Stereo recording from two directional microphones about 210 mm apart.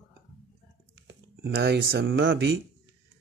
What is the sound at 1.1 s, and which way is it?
Speech, 55° right (ahead or behind).